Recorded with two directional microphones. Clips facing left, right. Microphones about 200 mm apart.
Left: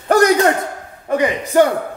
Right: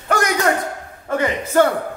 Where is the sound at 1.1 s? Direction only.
15° left (ahead or behind).